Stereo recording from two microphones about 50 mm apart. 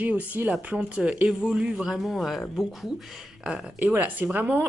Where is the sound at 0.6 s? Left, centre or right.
Right.